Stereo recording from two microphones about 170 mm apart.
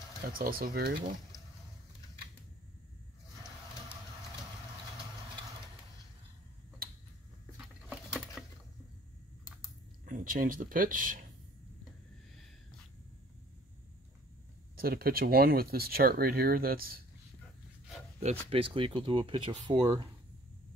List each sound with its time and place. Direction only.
0.3 s speech: 60° right (ahead or behind)
7.5 s patter: centre (ahead or behind)
10.0 s speech: 50° right (ahead or behind)
14.8 s speech: 60° right (ahead or behind)
18.2 s speech: 35° right (ahead or behind)